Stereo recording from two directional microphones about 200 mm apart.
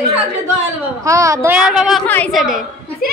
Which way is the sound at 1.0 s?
15° right (ahead or behind).